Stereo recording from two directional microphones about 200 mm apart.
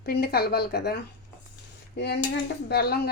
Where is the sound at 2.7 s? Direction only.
50° left (ahead or behind).